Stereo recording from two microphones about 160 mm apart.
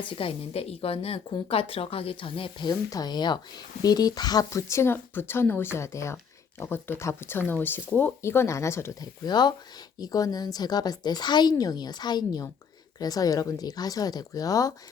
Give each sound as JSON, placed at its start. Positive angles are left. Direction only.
{"t": 0.2, "sound": "speech", "side_deg": 35}